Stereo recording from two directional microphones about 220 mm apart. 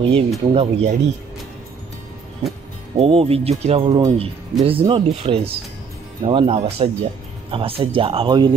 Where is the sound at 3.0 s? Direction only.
25° right (ahead or behind).